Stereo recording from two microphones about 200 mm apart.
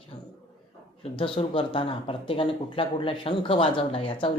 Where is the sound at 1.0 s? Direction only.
25° left (ahead or behind).